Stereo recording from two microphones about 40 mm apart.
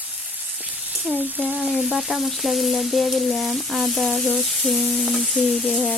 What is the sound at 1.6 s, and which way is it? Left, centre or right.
Frying, right.